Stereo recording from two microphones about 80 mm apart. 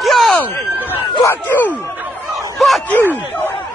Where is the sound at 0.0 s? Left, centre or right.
Centre.